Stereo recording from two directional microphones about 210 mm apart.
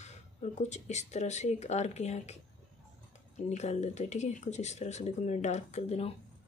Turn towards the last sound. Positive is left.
turn(degrees=30)  # may be behind; listen again after turning